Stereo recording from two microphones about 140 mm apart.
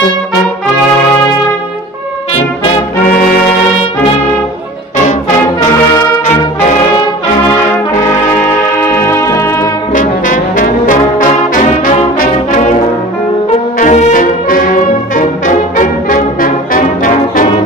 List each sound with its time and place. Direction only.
9.0 s music: 20° left (ahead or behind)
9.9 s brass instrument: 70° left (ahead or behind)
13.7 s brass instrument: 60° left (ahead or behind); by 17.5 s 75° left (ahead or behind)